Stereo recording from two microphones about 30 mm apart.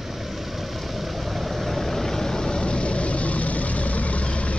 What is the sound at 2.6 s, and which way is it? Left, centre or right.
Vehicle, left.